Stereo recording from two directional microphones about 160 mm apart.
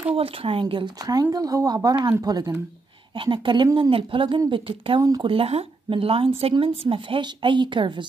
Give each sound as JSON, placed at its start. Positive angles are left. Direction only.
{"t": 0.1, "sound": "speech", "side_deg": -35}